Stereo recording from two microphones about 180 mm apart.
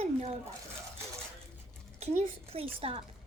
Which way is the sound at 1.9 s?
35° right (ahead or behind).